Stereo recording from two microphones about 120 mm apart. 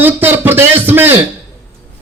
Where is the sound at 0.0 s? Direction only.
15° right (ahead or behind).